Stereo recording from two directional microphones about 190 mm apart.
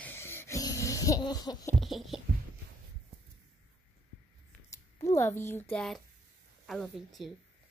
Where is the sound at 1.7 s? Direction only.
Centre (ahead or behind).